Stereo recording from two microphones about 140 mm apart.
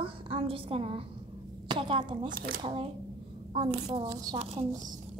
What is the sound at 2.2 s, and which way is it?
Speech, 90° right.